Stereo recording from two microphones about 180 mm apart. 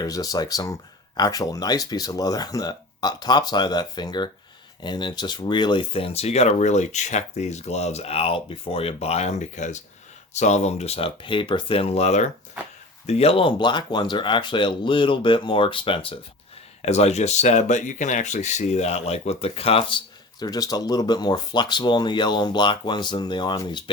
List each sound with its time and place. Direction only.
0.0 s speech: 20° left (ahead or behind)
20.4 s speech: 20° left (ahead or behind)